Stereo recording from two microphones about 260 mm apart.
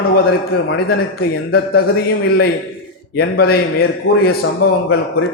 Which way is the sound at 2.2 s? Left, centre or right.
Left.